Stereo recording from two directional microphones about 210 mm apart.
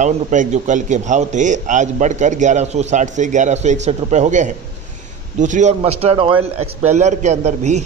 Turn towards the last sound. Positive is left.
turn(degrees=-35)  # may be behind; listen again after turning